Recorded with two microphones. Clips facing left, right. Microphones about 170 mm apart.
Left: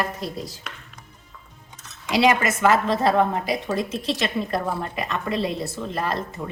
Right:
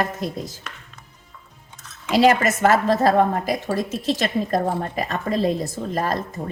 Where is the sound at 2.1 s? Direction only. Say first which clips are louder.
Right 3 dB; 40° right (ahead or behind).